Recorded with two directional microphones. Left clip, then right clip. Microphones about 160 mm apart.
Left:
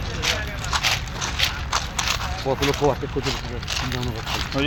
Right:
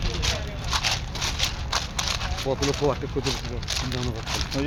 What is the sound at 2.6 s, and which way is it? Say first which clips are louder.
Speech: left 4 dB; 40° left (ahead or behind).